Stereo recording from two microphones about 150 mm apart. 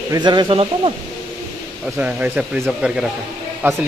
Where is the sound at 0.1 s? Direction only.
30° right (ahead or behind).